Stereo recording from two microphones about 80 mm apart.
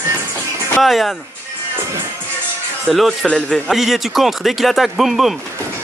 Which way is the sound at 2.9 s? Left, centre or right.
Centre.